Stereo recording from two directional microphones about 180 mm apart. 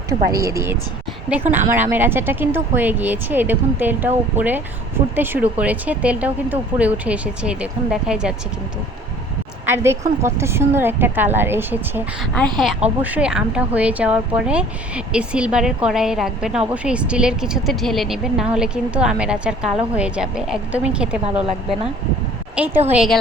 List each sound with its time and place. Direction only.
0.1 s speech: 20° right (ahead or behind)
9.6 s speech: 15° right (ahead or behind)